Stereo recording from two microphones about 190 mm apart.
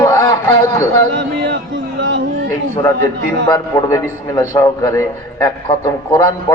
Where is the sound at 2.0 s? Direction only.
65° right (ahead or behind).